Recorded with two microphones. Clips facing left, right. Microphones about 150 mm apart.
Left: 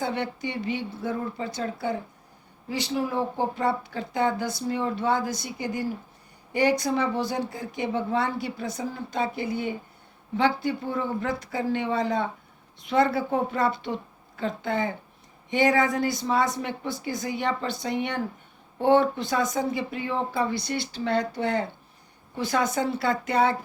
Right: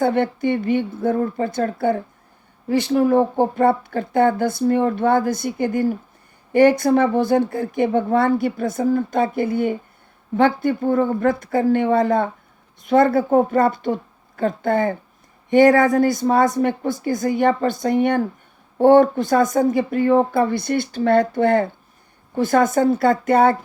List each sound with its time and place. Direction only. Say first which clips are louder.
0.0 s speech: right 10 dB; 50° right (ahead or behind)